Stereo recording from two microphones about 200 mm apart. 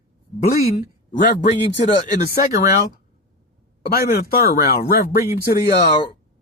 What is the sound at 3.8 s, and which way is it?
A man's voice, 50° left (ahead or behind).